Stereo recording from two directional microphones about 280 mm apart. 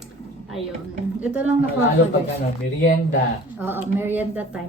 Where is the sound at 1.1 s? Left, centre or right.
Centre.